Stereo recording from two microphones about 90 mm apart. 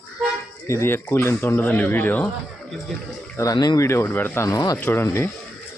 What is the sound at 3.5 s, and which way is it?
Speech, 45° left (ahead or behind).